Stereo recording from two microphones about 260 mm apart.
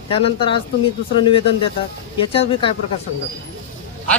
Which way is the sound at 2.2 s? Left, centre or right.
Centre.